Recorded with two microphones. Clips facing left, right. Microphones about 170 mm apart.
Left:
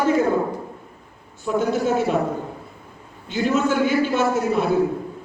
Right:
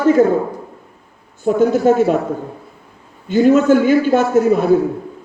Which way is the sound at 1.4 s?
45° right (ahead or behind).